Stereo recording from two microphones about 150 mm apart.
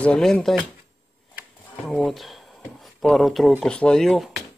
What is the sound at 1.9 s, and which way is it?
Speech, centre (ahead or behind).